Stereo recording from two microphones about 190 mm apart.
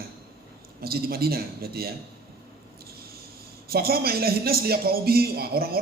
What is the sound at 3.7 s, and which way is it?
Speech, 55° right (ahead or behind).